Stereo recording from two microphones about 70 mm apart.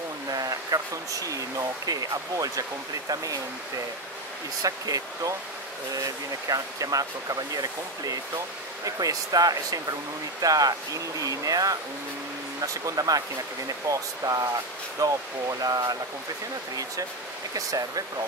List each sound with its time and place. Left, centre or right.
0.3 s speech: right
6.5 s speech: right
17.6 s speech: right